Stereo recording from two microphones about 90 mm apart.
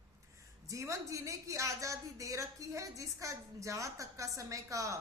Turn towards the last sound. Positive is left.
turn(degrees=-35)  # may be behind; listen again after turning